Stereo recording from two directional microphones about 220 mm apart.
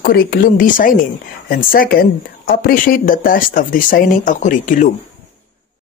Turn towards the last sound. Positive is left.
turn(degrees=35)  # may be behind; listen again after turning